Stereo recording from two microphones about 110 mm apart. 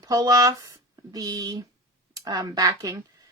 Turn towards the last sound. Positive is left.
turn(degrees=-30)  # may be behind; listen again after turning